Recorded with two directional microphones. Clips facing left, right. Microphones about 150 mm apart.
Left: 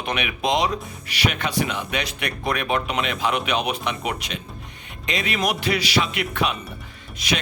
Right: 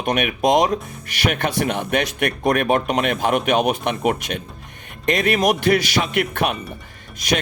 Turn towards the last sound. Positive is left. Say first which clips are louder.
# right 4 dB
turn(degrees=-45)  # may be behind; listen again after turning